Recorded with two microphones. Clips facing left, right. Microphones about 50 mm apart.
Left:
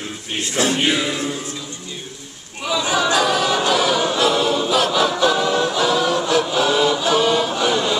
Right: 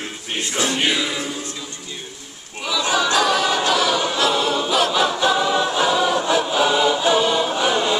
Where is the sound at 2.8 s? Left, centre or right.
Centre.